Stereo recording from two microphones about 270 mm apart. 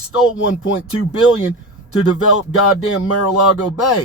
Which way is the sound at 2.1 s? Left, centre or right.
Left.